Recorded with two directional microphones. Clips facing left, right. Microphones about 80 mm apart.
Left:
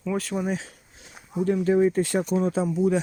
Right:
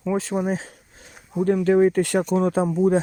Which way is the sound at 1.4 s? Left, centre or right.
Right.